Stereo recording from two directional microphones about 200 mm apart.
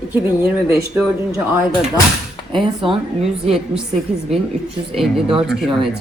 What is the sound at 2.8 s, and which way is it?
Speech, 30° right (ahead or behind).